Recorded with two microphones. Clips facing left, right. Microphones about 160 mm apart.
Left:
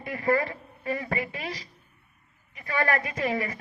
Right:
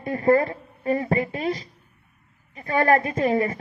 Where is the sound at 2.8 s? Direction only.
30° right (ahead or behind).